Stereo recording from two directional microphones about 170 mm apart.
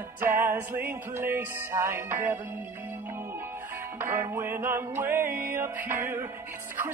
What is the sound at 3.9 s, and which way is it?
Music, 15° right (ahead or behind).